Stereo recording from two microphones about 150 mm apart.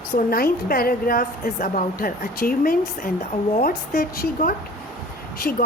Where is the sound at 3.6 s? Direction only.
90° left.